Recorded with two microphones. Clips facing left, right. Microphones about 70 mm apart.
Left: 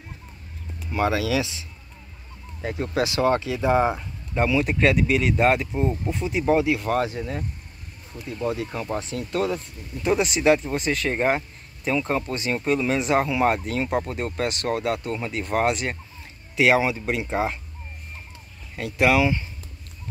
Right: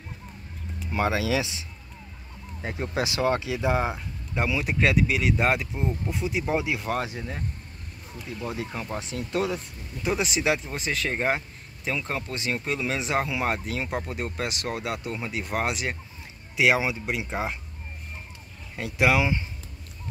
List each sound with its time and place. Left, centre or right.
0.8 s speech: centre
2.9 s speech: centre
8.3 s speech: centre
8.9 s speech: centre
10.0 s speech: centre
18.8 s speech: centre